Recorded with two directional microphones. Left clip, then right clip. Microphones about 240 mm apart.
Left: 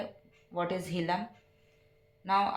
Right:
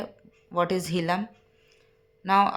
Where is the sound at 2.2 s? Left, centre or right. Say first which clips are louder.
Right 7 dB; right.